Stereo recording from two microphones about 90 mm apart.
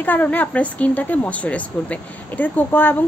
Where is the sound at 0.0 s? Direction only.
20° left (ahead or behind).